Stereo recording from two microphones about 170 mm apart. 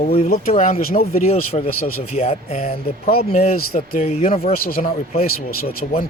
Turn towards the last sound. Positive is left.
turn(degrees=60)  # may be behind; listen again after turning